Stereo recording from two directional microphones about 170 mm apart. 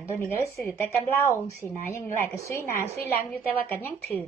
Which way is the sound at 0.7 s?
15° left (ahead or behind).